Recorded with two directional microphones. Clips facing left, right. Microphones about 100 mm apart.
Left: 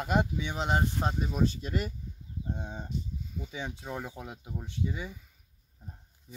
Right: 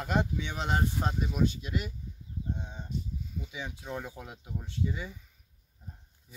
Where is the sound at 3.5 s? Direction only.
30° left (ahead or behind).